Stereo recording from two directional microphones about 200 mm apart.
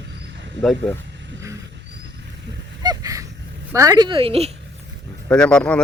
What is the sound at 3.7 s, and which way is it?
Speech, 15° right (ahead or behind).